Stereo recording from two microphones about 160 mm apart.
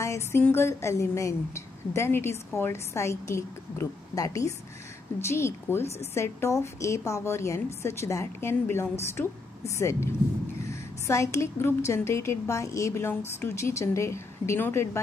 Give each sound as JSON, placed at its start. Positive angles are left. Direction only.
{"t": 0.0, "sound": "a woman's voice", "side_deg": 15}